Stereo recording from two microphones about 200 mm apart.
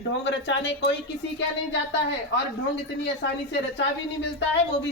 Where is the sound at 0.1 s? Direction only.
60° left (ahead or behind).